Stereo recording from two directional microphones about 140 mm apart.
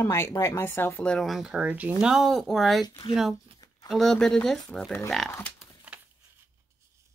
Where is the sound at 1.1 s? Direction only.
Centre (ahead or behind).